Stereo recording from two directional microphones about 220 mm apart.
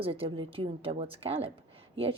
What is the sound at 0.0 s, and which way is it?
Speech, 25° right (ahead or behind).